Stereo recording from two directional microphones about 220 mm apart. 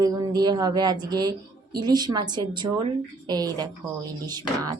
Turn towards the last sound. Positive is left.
turn(degrees=-20)  # may be behind; listen again after turning